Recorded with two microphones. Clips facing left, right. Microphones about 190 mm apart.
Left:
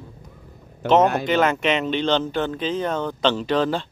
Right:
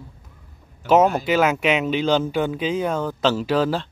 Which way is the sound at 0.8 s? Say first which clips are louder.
Right 1 dB; 10° right (ahead or behind).